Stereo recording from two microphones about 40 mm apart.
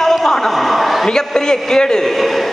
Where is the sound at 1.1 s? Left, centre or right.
Centre.